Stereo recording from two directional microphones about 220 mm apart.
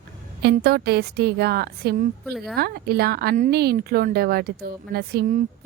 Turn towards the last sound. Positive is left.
turn(degrees=-40)  # may be behind; listen again after turning